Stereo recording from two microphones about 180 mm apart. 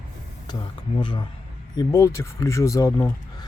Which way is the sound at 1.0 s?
25° left (ahead or behind).